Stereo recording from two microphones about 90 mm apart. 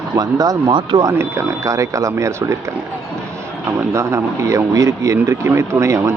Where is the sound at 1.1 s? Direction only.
30° right (ahead or behind).